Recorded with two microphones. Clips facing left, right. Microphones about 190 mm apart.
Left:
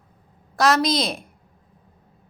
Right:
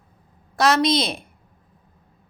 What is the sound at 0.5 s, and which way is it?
Speech, centre (ahead or behind).